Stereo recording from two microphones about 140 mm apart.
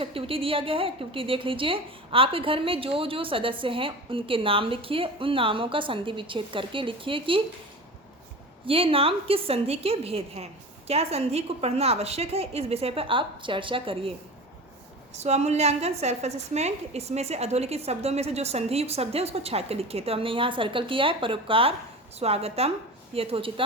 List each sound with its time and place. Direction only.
0.0 s a woman's voice: 40° right (ahead or behind)
8.6 s a woman's voice: 40° right (ahead or behind)
15.1 s a woman's voice: 50° right (ahead or behind)